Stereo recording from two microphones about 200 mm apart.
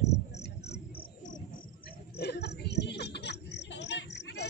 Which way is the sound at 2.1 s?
55° left (ahead or behind).